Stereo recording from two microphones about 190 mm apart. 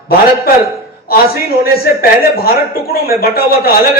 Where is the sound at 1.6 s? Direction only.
50° left (ahead or behind).